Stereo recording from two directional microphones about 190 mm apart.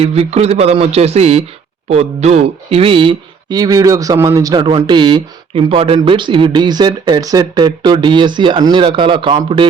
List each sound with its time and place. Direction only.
0.0 s a man's voice: 35° right (ahead or behind)